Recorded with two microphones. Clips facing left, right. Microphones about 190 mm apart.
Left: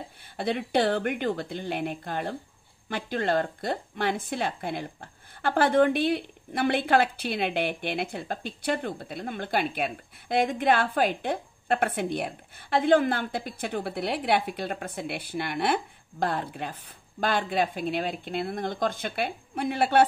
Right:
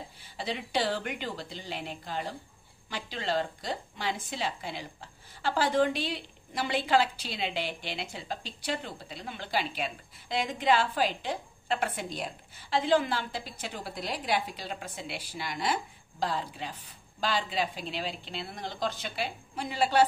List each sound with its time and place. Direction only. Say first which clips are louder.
0.4 s speech: left 6 dB; 55° left (ahead or behind)